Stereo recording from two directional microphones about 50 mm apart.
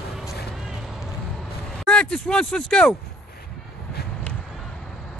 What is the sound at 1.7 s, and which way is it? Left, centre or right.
Speech, centre.